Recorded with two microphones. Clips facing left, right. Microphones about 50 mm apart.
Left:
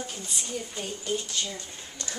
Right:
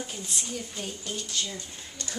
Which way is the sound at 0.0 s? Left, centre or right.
Centre.